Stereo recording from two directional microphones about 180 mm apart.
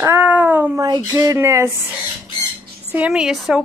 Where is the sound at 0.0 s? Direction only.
10° right (ahead or behind).